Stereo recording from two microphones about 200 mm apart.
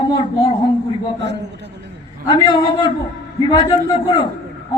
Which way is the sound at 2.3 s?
20° left (ahead or behind).